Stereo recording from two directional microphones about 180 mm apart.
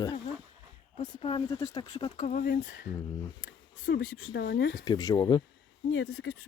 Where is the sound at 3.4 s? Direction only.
80° left.